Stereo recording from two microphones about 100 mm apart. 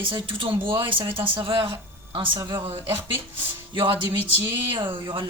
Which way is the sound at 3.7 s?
60° right (ahead or behind).